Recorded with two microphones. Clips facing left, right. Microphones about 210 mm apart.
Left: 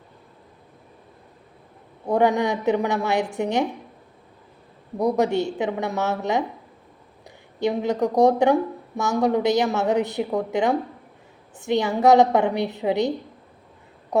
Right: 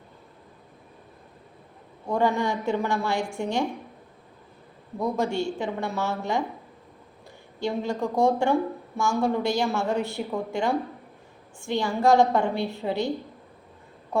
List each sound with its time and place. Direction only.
2.0 s a woman's voice: 20° left (ahead or behind)
4.9 s a woman's voice: 20° left (ahead or behind)